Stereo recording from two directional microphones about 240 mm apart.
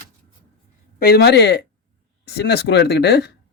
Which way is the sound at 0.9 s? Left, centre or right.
Left.